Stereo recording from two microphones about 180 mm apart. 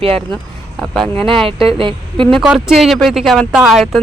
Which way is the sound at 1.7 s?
30° right (ahead or behind).